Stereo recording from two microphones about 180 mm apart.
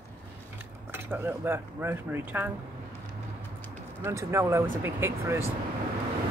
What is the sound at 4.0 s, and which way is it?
Speech, 15° right (ahead or behind).